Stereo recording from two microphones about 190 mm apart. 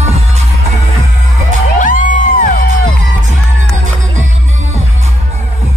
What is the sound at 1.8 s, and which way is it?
Music, 45° left (ahead or behind).